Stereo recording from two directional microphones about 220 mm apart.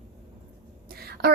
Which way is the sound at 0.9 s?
45° right (ahead or behind).